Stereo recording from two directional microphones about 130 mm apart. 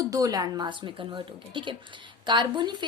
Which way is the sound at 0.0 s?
25° right (ahead or behind).